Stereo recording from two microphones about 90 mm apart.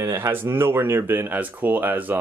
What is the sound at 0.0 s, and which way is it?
Speech, 30° right (ahead or behind).